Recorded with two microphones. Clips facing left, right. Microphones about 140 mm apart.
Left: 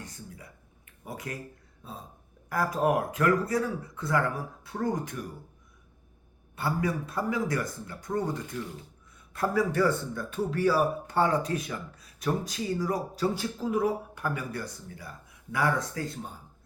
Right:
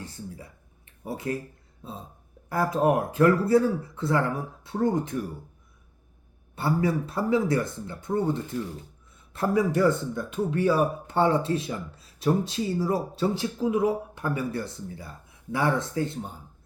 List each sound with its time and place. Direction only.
0.0 s a sound: 30° right (ahead or behind)
1.0 s speech: 30° right (ahead or behind)
6.6 s speech: 30° right (ahead or behind)